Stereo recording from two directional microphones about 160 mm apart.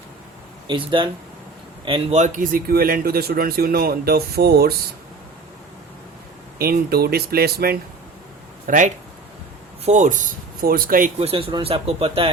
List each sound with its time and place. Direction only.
0.7 s a man's voice: 30° right (ahead or behind); by 4.8 s 75° right (ahead or behind)
6.6 s a man's voice: 75° right (ahead or behind)
8.6 s speech: 55° right (ahead or behind)
11.2 s speech: 35° right (ahead or behind)